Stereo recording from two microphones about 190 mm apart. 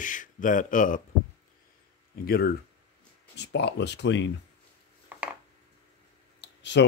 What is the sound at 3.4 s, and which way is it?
Speech, 65° left (ahead or behind).